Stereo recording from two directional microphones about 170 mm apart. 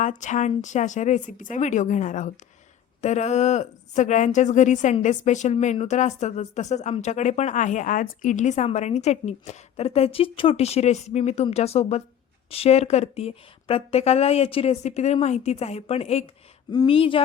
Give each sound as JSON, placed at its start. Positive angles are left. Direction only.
{"t": 0.0, "sound": "speech", "side_deg": 45}